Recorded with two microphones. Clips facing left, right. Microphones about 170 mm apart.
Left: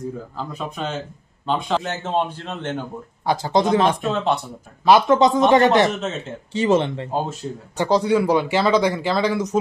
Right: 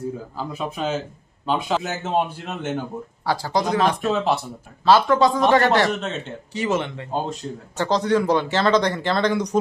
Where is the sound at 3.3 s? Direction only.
20° left (ahead or behind).